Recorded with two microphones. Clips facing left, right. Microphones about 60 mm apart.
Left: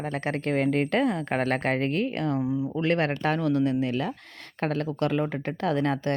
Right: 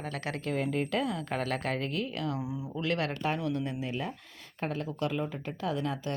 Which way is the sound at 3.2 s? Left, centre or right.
Left.